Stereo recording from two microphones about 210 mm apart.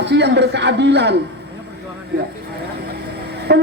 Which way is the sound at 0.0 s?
55° right (ahead or behind).